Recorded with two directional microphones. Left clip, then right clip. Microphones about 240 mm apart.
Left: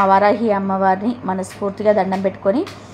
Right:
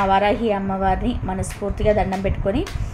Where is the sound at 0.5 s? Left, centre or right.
Centre.